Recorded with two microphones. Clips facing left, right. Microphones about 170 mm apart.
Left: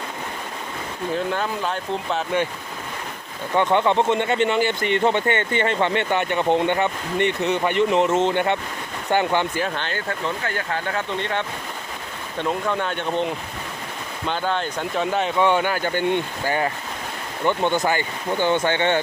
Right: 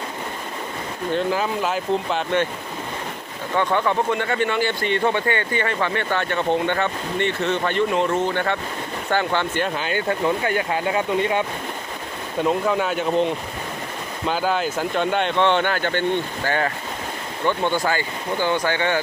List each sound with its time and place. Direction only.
1.1 s speech: 5° right (ahead or behind)
3.5 s speech: 20° left (ahead or behind)
9.6 s speech: 5° right (ahead or behind)
9.9 s speech: 20° right (ahead or behind); by 18.9 s 25° left (ahead or behind)